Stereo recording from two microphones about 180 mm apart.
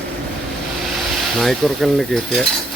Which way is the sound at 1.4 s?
Centre (ahead or behind).